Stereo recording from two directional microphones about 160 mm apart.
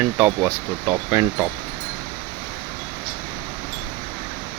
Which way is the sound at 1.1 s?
20° right (ahead or behind).